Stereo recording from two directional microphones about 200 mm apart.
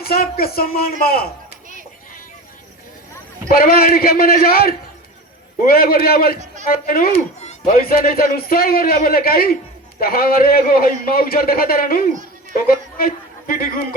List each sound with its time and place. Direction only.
0.0 s a man's voice: 50° left (ahead or behind)
3.5 s a man's voice: 50° left (ahead or behind)